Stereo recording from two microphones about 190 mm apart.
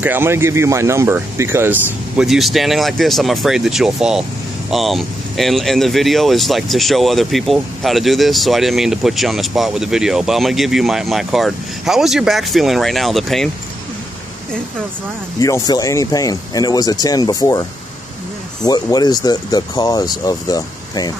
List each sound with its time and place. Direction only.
0.0 s speech: 10° right (ahead or behind)
15.4 s speech: 20° left (ahead or behind)